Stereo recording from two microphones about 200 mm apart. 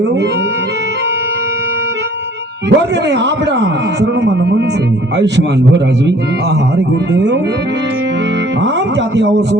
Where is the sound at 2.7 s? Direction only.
60° right (ahead or behind).